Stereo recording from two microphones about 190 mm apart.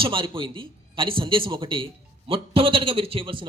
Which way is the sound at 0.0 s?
25° right (ahead or behind).